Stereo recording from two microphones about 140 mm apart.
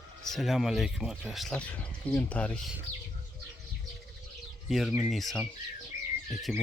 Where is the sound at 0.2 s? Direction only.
Centre (ahead or behind).